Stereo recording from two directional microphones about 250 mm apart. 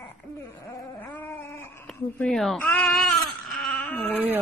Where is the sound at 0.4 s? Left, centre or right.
Centre.